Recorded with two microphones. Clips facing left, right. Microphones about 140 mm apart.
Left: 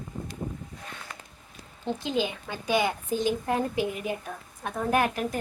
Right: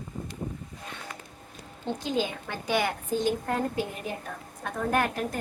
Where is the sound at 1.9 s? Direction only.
15° left (ahead or behind).